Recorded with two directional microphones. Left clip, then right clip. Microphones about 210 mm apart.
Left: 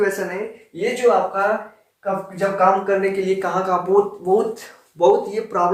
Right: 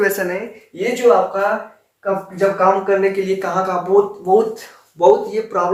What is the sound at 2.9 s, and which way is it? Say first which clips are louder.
A man's voice: right 3 dB; 5° right (ahead or behind).